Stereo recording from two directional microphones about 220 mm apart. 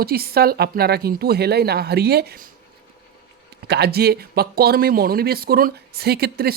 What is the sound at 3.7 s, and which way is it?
Speech, 45° right (ahead or behind).